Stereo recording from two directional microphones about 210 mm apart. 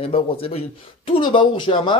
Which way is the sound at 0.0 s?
25° left (ahead or behind).